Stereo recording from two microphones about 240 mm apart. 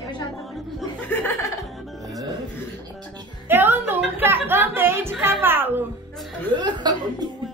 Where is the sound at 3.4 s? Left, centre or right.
Centre.